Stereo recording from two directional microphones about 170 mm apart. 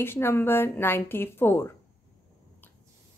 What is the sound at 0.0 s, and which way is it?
A woman's voice, 15° left (ahead or behind).